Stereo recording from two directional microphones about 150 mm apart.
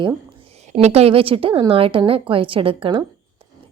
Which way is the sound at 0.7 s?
50° right (ahead or behind).